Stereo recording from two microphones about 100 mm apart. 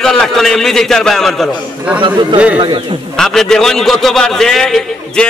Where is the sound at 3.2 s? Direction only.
5° left (ahead or behind).